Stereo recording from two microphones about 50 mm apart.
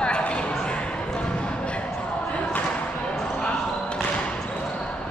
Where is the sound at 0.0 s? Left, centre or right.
Left.